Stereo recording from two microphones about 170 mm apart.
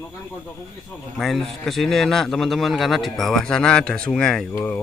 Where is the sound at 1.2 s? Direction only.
Centre (ahead or behind).